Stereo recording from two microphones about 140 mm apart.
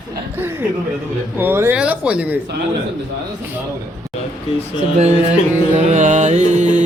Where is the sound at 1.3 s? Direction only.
15° right (ahead or behind).